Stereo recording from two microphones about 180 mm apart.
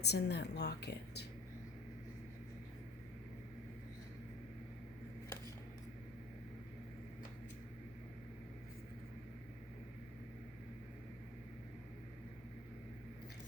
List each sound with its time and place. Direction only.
0.0 s a woman's voice: 70° left (ahead or behind)